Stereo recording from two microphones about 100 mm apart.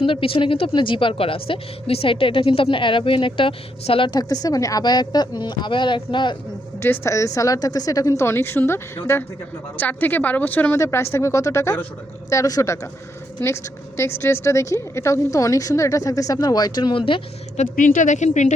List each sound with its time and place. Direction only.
0.0 s a woman's voice: 60° left (ahead or behind)
4.1 s speech: 40° left (ahead or behind)
6.8 s a woman's voice: 25° left (ahead or behind); by 17.0 s 45° left (ahead or behind)